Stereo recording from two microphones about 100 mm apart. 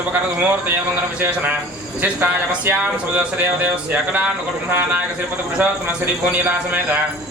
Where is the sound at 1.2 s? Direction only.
20° right (ahead or behind).